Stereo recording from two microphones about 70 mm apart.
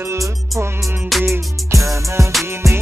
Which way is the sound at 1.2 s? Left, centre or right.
Right.